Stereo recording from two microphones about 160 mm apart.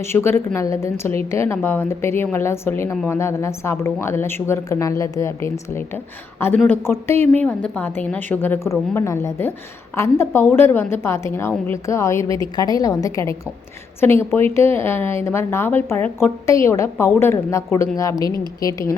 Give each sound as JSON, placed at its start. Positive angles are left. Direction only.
{"t": 0.1, "sound": "a woman's voice", "side_deg": 15}